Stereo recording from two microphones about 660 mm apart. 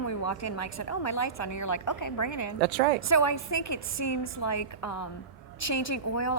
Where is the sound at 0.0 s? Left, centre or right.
Left.